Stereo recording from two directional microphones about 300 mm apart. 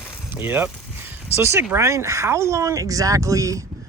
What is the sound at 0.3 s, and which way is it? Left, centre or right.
Speech, centre.